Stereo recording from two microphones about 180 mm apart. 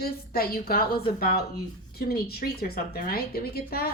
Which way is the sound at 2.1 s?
60° left (ahead or behind).